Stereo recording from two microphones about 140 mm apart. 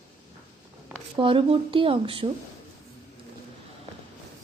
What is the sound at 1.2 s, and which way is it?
Speech, 40° right (ahead or behind).